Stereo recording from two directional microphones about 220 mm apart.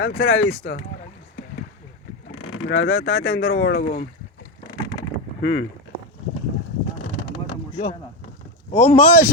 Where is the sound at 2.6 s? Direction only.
60° left (ahead or behind).